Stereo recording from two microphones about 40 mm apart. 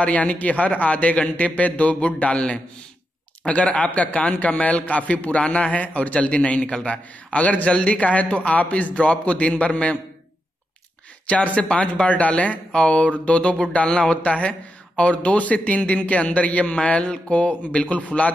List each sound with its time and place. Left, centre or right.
0.0 s a man's voice: left
11.2 s a man's voice: left